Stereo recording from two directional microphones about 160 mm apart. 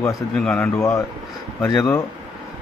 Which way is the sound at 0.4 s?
5° left (ahead or behind).